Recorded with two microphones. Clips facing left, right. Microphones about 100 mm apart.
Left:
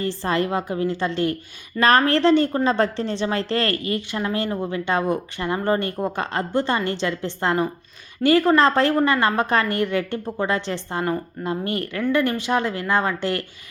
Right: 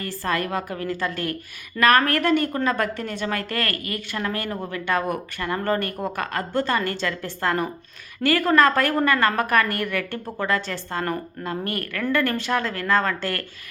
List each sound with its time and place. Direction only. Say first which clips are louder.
0.0 s a woman's voice: left 3 dB; 25° left (ahead or behind)